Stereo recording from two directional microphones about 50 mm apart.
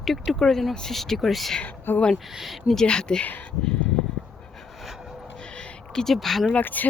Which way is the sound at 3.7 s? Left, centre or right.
Left.